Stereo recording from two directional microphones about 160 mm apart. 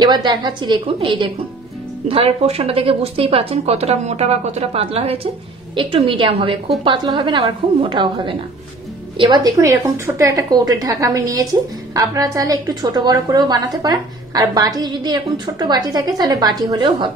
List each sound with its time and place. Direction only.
0.0 s a woman's voice: 25° right (ahead or behind)